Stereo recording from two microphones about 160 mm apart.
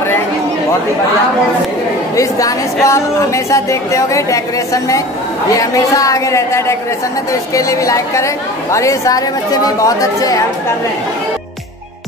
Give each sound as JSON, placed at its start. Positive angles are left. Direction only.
{"t": 2.1, "sound": "speech", "side_deg": 20}